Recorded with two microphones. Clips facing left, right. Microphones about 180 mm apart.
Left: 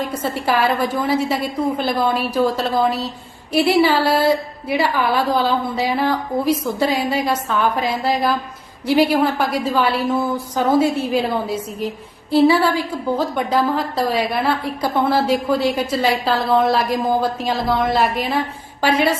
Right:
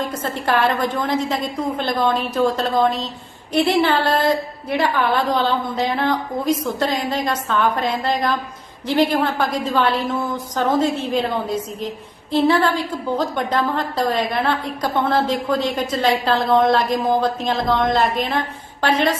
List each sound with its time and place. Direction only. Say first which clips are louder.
0.0 s a woman's voice: left 2 dB; 10° left (ahead or behind)